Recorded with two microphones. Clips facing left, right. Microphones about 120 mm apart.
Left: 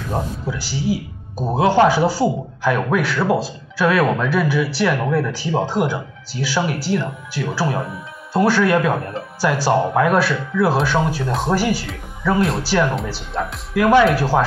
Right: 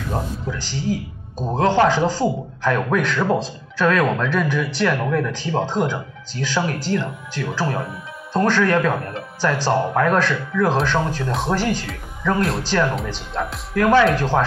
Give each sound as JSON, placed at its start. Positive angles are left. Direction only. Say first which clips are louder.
{"t": 0.1, "sound": "speech", "louder": "left 3 dB", "side_deg": 10}